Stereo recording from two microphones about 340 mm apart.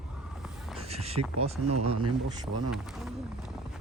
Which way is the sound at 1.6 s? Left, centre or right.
Right.